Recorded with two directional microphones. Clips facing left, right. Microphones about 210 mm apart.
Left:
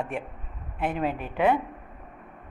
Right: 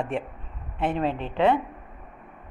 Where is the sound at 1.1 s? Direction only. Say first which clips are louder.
Right 2 dB; 25° right (ahead or behind).